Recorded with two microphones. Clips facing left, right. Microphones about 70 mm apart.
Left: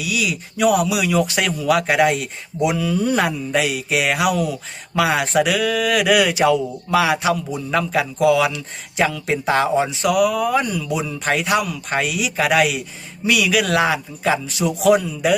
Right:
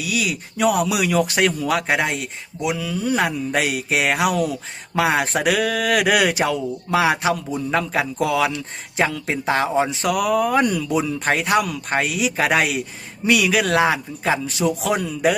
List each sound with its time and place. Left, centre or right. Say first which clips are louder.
0.0 s speech: left 1 dB; right
0.5 s speech: left 2 dB; right
0.9 s a man's voice: left 1 dB; right
2.6 s speech: left 3 dB; centre
3.5 s speech: left 1 dB; right
4.9 s speech: left 2 dB; right
6.4 s a man's voice: left 5 dB; right
10.6 s speech: right 4 dB; right
10.9 s a man's voice: right 1 dB; right
14.6 s speech: right 2 dB; centre